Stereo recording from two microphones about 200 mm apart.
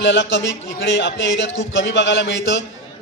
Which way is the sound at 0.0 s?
65° left (ahead or behind).